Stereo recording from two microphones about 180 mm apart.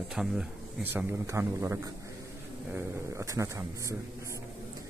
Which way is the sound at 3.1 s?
15° right (ahead or behind).